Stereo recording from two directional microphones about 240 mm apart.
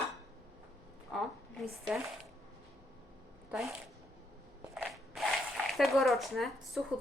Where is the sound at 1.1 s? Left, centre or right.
Centre.